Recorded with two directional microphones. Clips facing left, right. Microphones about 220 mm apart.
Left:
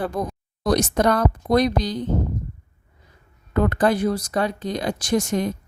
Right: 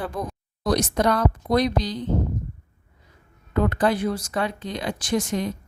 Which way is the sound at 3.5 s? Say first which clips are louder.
Left 2 dB; 50° left (ahead or behind).